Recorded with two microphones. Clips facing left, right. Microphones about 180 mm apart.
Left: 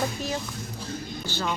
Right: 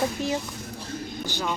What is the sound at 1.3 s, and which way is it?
Speech, 15° right (ahead or behind).